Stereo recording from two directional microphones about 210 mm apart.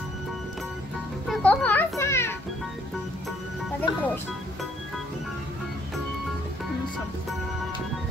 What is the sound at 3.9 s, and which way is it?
Speech, 20° left (ahead or behind).